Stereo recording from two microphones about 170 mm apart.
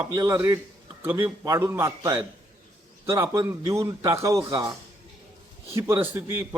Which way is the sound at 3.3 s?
20° right (ahead or behind).